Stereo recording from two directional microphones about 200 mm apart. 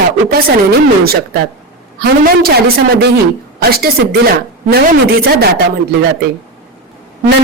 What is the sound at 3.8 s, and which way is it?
Speech, 50° right (ahead or behind).